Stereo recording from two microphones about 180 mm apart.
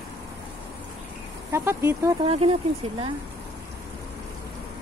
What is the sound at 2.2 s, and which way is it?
Speech, 35° right (ahead or behind).